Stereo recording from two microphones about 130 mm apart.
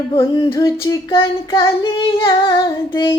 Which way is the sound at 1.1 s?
40° left (ahead or behind).